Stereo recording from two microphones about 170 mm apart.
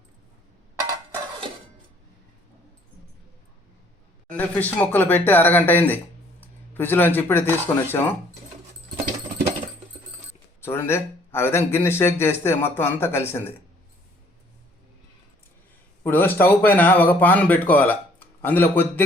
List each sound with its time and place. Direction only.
4.3 s speech: 10° left (ahead or behind)
10.6 s speech: 15° left (ahead or behind)
16.0 s speech: 10° left (ahead or behind)